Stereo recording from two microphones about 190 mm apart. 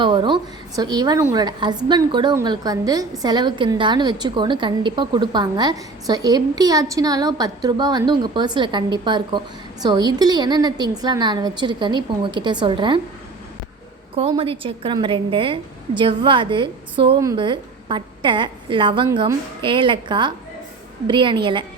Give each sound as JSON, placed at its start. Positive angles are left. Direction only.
{"t": 0.0, "sound": "a woman's voice", "side_deg": -25}
{"t": 14.2, "sound": "a woman's voice", "side_deg": -30}